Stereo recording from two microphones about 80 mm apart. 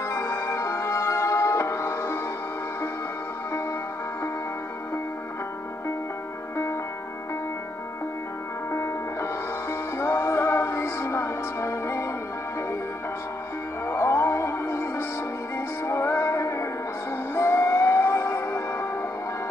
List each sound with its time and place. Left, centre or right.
0.0 s music: left
6.5 s music: left
8.7 s music: left
13.8 s music: left